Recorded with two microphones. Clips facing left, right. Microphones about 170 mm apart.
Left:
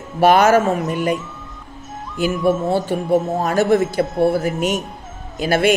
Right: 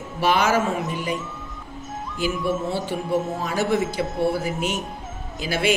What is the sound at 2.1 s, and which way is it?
A man's voice, 50° left (ahead or behind).